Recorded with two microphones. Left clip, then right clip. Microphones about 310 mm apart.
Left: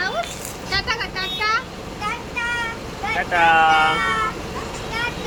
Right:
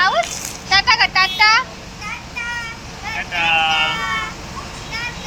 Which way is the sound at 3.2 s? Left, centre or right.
Centre.